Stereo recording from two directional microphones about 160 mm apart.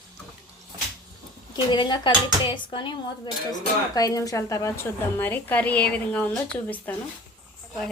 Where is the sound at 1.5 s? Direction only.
30° left (ahead or behind).